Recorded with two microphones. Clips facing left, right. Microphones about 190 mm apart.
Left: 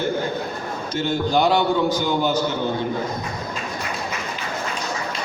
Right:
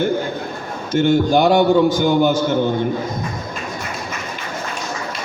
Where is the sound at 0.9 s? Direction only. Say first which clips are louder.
Right 8 dB; 50° right (ahead or behind).